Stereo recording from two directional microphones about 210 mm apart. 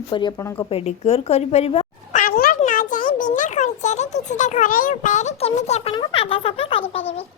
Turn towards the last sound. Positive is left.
turn(degrees=25)  # may be behind; listen again after turning